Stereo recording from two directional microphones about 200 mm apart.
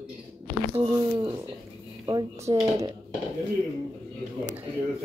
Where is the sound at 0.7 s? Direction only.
25° right (ahead or behind).